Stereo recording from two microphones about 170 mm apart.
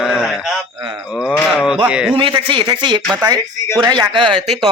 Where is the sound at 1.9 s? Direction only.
5° right (ahead or behind).